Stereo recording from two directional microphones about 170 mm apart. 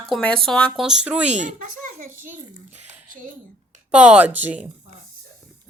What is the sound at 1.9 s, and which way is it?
Speech, 55° right (ahead or behind).